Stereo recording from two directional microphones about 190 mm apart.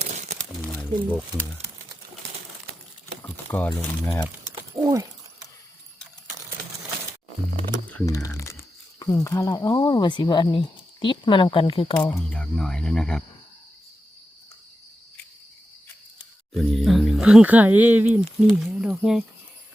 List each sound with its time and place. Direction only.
0.0 s crumpling: 40° right (ahead or behind)
0.6 s crumpling: 10° left (ahead or behind)
3.2 s speech: 10° left (ahead or behind)
4.7 s speech: 20° right (ahead or behind)
8.0 s speech: 15° left (ahead or behind)
12.0 s speech: 5° left (ahead or behind)
16.6 s speech: centre (ahead or behind)